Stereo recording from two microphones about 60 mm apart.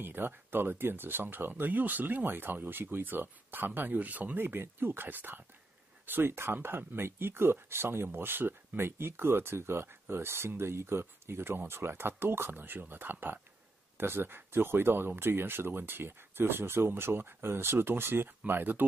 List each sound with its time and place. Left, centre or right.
0.0 s speech: right